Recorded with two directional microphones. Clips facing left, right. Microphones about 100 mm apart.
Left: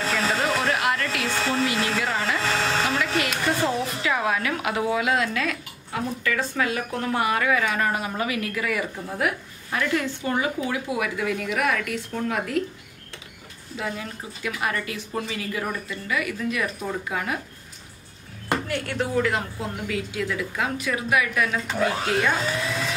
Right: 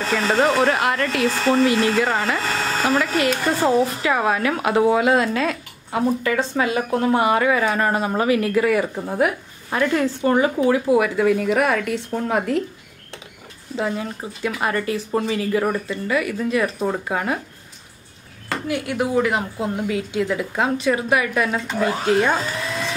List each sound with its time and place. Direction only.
0.6 s a sound: 40° right (ahead or behind)
1.2 s speech: centre (ahead or behind)
2.0 s speech: 35° right (ahead or behind)
2.4 s a sound: centre (ahead or behind)
3.6 s speech: 45° right (ahead or behind)
13.7 s speech: 35° right (ahead or behind)
16.8 s speech: 45° right (ahead or behind)
18.7 s a woman's voice: 15° right (ahead or behind); by 21.5 s 35° right (ahead or behind)
21.6 s speech: centre (ahead or behind)
22.1 s speech: 35° right (ahead or behind)
22.4 s speech: centre (ahead or behind)